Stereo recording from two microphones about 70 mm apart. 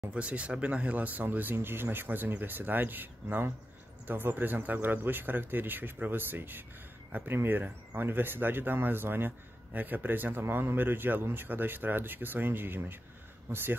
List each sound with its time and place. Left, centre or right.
0.1 s speech: centre